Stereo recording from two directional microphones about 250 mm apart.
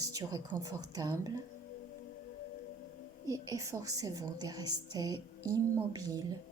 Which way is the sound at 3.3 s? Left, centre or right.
Centre.